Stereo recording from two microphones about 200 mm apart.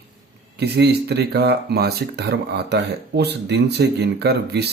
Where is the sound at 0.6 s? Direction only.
55° right (ahead or behind).